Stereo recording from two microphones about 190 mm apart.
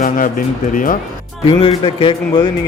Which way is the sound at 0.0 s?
45° left (ahead or behind).